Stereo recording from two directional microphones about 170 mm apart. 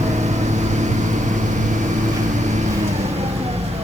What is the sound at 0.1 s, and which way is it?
Vehicle, 45° right (ahead or behind).